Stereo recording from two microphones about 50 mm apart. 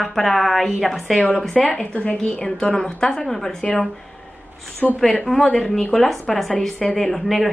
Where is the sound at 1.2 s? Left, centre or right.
Left; by 3.7 s centre.